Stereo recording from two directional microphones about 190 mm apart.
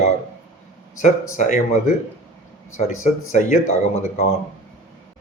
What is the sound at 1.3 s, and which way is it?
Speech, 40° left (ahead or behind).